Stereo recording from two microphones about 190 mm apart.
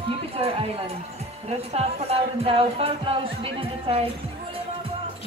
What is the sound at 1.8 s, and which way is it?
Speech, 30° right (ahead or behind).